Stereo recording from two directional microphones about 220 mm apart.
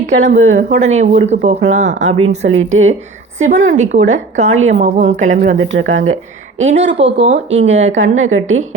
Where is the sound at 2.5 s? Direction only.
65° right (ahead or behind).